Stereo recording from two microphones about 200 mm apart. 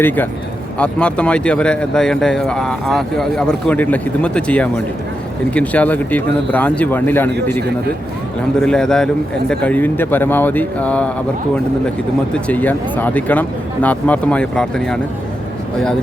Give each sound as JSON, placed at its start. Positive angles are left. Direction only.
{"t": 0.8, "sound": "speech", "side_deg": 5}
{"t": 8.6, "sound": "speech", "side_deg": 5}
{"t": 12.3, "sound": "speech", "side_deg": 5}